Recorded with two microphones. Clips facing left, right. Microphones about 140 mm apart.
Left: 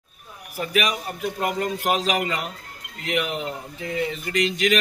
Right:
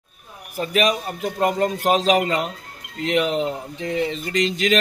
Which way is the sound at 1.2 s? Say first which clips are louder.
Right 5 dB; 35° right (ahead or behind).